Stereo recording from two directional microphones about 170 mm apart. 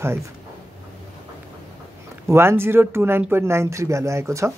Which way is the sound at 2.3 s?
15° right (ahead or behind).